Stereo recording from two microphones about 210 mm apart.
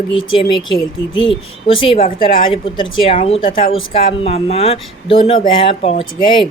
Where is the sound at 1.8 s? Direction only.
25° left (ahead or behind).